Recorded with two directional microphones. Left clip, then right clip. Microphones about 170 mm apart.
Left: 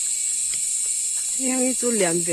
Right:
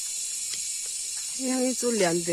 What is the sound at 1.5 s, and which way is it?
Speech, 20° right (ahead or behind).